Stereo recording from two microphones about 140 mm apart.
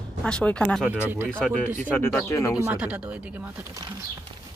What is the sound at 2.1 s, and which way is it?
Speech, 20° left (ahead or behind).